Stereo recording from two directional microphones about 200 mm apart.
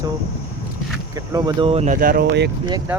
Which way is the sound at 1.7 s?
35° right (ahead or behind).